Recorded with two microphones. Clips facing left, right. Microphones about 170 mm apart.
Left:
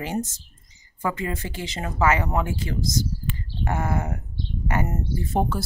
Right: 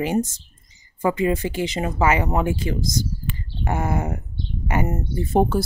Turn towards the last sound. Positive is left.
turn(degrees=-15)  # may be behind; listen again after turning